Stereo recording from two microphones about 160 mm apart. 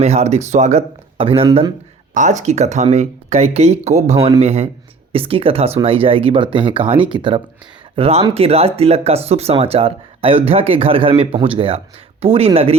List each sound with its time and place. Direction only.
0.0 s speech: 45° right (ahead or behind)
2.1 s speech: 50° right (ahead or behind)